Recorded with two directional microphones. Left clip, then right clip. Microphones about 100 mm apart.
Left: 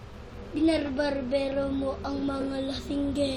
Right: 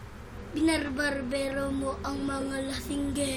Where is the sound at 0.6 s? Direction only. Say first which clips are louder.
Left 2 dB; 20° right (ahead or behind).